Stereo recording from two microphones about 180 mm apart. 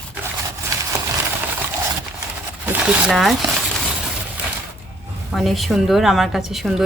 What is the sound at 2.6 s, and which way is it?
Speech, 10° right (ahead or behind).